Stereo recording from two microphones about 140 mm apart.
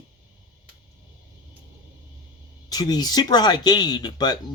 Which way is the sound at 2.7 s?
30° left (ahead or behind).